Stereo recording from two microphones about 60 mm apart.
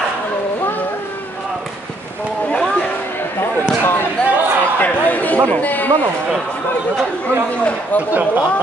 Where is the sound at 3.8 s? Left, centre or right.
Left.